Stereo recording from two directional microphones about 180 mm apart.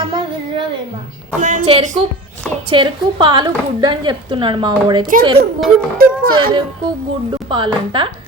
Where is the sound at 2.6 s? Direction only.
25° right (ahead or behind).